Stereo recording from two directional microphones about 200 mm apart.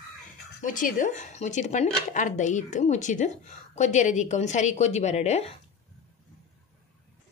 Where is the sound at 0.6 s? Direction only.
40° left (ahead or behind).